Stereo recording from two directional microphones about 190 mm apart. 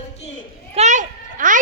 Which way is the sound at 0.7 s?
40° right (ahead or behind).